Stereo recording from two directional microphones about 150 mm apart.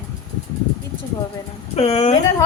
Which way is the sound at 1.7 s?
45° left (ahead or behind).